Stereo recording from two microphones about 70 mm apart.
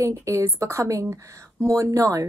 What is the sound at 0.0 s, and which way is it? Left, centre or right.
A woman's voice, right.